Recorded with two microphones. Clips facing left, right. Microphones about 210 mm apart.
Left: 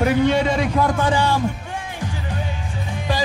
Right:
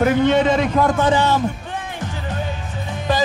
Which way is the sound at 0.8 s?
20° right (ahead or behind).